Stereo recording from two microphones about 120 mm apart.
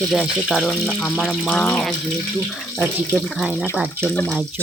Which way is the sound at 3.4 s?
10° right (ahead or behind).